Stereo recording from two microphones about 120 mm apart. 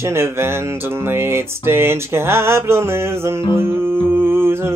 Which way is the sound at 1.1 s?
20° right (ahead or behind).